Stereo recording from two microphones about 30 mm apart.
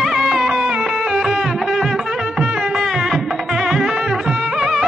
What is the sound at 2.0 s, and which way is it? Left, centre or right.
Music, right.